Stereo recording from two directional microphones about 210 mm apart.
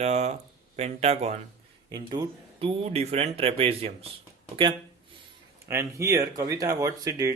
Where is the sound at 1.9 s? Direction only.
20° right (ahead or behind).